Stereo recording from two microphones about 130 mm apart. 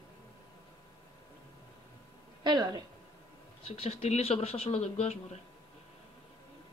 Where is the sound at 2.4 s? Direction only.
35° right (ahead or behind).